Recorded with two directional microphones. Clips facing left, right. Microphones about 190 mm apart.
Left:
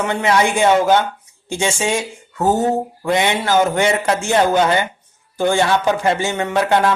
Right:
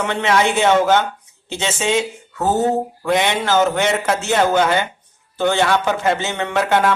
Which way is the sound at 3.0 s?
10° left (ahead or behind).